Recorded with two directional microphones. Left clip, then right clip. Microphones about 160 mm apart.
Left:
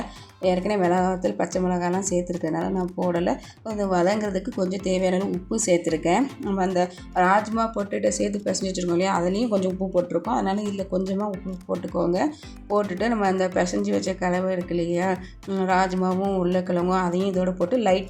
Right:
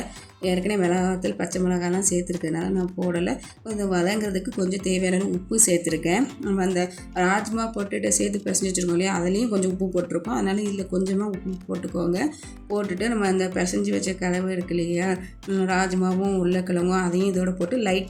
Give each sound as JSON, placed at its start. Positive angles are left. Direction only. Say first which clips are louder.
{"t": 0.5, "sound": "speech", "louder": "even", "side_deg": -10}